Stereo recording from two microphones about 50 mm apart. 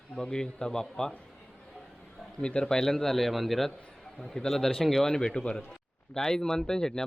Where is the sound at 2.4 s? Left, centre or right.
Centre.